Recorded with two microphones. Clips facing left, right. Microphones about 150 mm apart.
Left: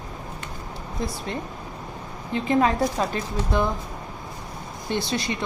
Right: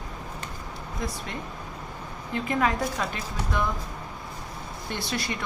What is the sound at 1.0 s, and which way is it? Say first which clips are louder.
Speech: left 3 dB; 30° left (ahead or behind).